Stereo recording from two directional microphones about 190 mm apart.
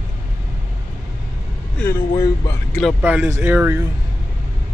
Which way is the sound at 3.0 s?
10° right (ahead or behind).